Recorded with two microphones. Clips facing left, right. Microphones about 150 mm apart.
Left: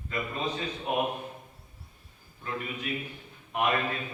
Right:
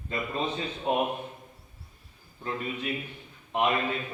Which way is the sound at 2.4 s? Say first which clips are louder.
Right 2 dB; 30° right (ahead or behind).